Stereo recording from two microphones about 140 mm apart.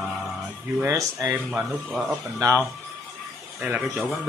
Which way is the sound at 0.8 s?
25° right (ahead or behind).